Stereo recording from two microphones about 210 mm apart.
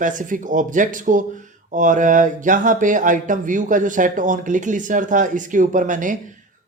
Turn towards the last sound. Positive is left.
turn(degrees=-40)  # may be behind; listen again after turning